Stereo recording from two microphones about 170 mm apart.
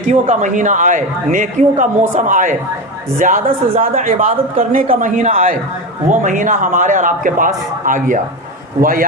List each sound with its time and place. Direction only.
0.1 s a woman's voice: 45° right (ahead or behind)